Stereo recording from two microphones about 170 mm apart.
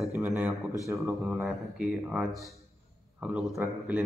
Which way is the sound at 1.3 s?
5° right (ahead or behind).